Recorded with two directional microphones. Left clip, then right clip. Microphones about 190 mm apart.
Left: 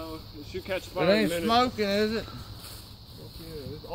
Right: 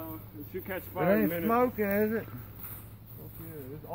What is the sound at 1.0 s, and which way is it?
Speech, 65° left (ahead or behind).